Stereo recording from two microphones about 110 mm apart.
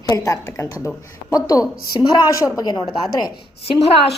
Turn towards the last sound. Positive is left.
turn(degrees=65)  # may be behind; listen again after turning